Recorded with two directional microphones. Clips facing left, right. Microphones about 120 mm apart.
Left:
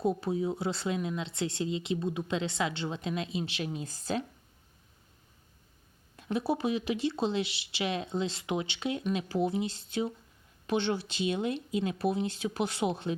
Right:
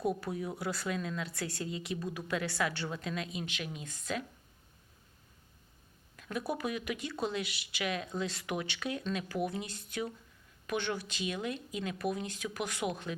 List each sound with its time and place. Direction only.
0.0 s speech: 25° left (ahead or behind)
6.1 s speech: 25° left (ahead or behind)